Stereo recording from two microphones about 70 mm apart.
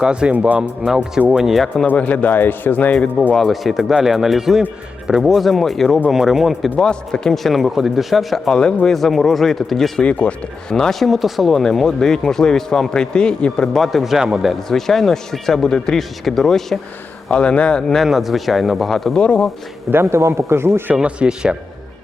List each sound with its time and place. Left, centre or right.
0.0 s speech: centre
0.9 s a man's voice: centre
1.9 s a man's voice: left
3.3 s a man's voice: centre
6.7 s a man's voice: centre
10.0 s speech: centre
13.7 s a man's voice: centre
17.2 s speech: centre
18.0 s a man's voice: centre
19.2 s speech: centre
19.9 s speech: right
20.9 s speech: centre